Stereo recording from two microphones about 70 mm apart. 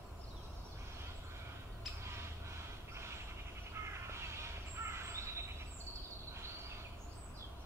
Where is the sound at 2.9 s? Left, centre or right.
Right.